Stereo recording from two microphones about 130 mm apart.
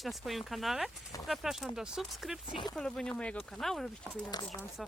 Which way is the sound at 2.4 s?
40° left (ahead or behind).